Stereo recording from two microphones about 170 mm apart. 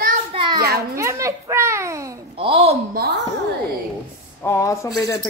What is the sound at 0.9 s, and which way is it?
A child's voice, 15° right (ahead or behind).